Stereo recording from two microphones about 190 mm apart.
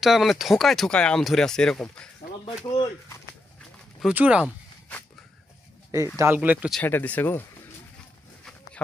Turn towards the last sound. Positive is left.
turn(degrees=10)  # may be behind; listen again after turning